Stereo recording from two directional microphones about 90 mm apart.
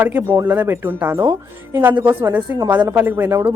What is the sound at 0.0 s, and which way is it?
A woman's voice, 20° right (ahead or behind).